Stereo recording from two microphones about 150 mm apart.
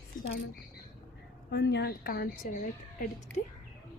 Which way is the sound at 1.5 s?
90° left.